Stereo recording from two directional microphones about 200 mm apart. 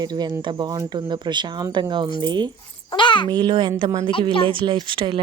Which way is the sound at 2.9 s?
25° left (ahead or behind).